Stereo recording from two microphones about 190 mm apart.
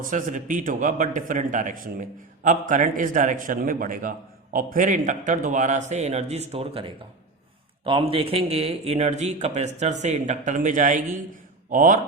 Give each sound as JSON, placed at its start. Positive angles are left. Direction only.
{"t": 0.0, "sound": "a man's voice", "side_deg": -45}